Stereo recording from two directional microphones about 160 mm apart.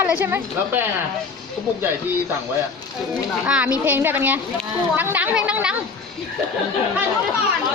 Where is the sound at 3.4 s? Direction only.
10° right (ahead or behind).